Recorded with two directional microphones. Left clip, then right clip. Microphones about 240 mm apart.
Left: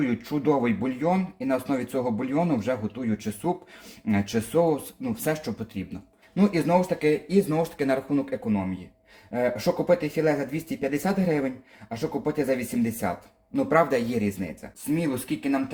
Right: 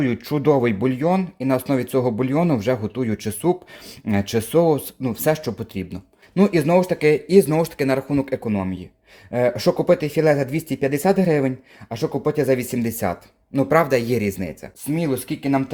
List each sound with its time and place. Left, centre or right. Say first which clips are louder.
0.0 s speech: right 6 dB; right